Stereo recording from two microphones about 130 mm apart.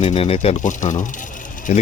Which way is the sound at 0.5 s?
75° left (ahead or behind).